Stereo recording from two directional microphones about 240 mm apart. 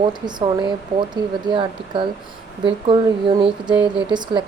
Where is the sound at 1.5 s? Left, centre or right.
Centre.